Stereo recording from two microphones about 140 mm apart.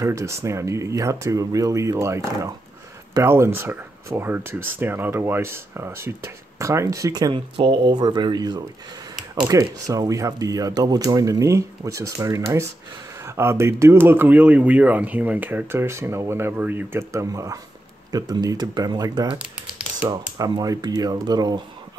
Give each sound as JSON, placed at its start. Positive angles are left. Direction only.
{"t": 0.0, "sound": "speech", "side_deg": -20}
{"t": 20.3, "sound": "speech", "side_deg": -25}